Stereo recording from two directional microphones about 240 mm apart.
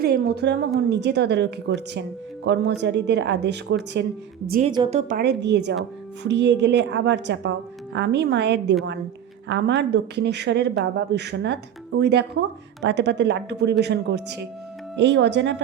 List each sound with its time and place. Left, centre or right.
0.0 s a woman's voice: right
4.8 s speech: right